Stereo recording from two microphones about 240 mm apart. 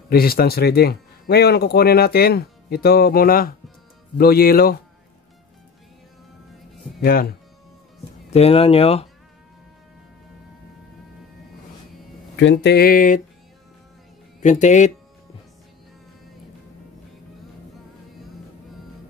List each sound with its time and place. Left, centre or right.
0.1 s speech: left
7.0 s speech: left
8.3 s speech: left
12.4 s speech: left
14.4 s speech: left